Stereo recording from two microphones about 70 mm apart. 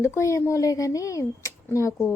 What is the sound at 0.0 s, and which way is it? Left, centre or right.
A woman's voice, left.